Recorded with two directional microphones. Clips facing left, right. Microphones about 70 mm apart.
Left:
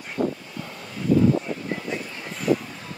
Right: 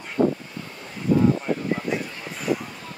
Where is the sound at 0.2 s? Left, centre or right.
Right.